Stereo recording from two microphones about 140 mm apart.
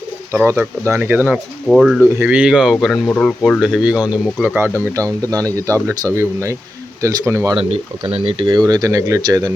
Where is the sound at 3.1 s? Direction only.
10° left (ahead or behind).